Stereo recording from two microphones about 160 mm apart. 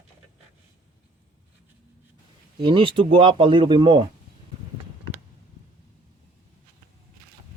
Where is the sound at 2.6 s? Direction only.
30° right (ahead or behind).